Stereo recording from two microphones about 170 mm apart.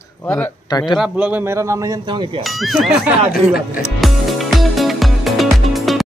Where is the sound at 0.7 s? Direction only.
25° left (ahead or behind).